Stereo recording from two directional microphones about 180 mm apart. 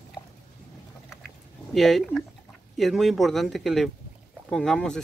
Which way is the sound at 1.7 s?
Centre (ahead or behind).